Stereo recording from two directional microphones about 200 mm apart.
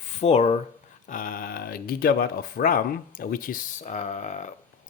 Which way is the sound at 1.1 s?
40° left (ahead or behind).